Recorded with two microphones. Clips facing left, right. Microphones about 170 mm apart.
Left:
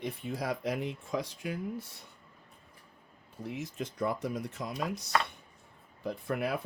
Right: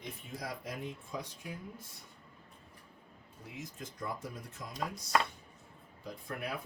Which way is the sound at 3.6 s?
75° left (ahead or behind).